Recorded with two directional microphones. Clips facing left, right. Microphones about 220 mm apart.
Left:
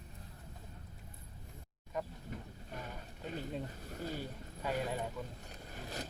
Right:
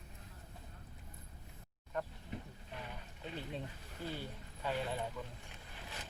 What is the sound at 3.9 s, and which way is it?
Speech, 40° left (ahead or behind).